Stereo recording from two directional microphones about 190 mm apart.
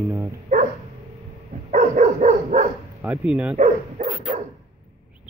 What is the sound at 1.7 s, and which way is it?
Dog, 40° right (ahead or behind).